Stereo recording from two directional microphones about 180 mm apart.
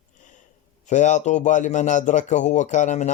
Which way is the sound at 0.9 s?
40° left (ahead or behind).